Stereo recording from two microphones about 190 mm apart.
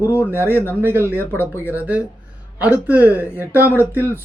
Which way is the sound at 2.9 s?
10° right (ahead or behind).